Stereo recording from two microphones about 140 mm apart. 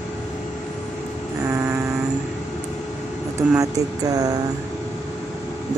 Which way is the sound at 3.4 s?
25° right (ahead or behind).